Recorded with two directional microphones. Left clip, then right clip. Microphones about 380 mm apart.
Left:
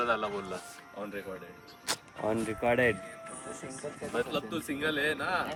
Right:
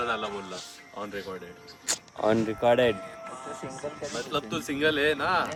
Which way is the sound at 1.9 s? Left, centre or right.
Centre.